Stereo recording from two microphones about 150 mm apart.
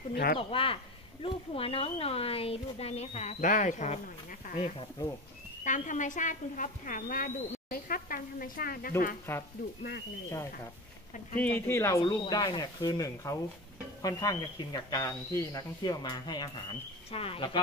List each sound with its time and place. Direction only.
0.1 s speech: 90° left
0.4 s speech: 35° left (ahead or behind); by 8.9 s 70° left (ahead or behind)
9.3 s speech: 15° left (ahead or behind)
12.0 s speech: 30° left (ahead or behind)
17.1 s speech: 40° left (ahead or behind)